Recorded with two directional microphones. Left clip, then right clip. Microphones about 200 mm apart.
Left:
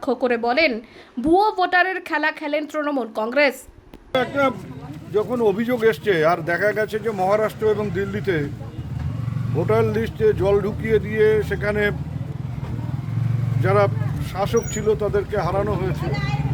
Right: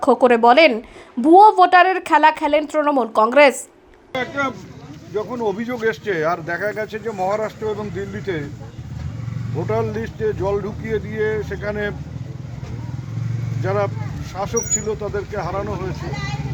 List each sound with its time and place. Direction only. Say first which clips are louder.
0.0 s a woman's voice: right 8 dB; 5° right (ahead or behind)
5.1 s speech: left 3 dB; 20° left (ahead or behind)
9.6 s speech: left 3 dB; 15° left (ahead or behind)
13.6 s speech: left 3 dB; 15° left (ahead or behind)